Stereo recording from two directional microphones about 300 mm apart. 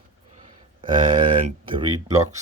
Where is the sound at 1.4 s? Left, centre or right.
Centre.